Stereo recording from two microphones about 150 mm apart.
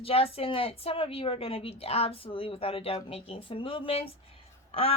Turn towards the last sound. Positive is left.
turn(degrees=40)  # may be behind; listen again after turning